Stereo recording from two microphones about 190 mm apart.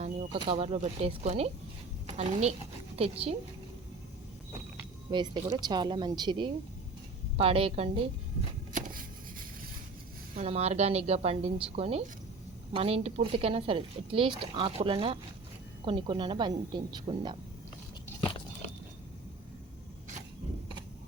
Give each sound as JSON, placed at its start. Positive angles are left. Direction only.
{"t": 0.3, "sound": "a woman's voice", "side_deg": -30}
{"t": 5.1, "sound": "speech", "side_deg": -25}
{"t": 8.7, "sound": "a sound", "side_deg": -50}
{"t": 10.3, "sound": "a woman's voice", "side_deg": -35}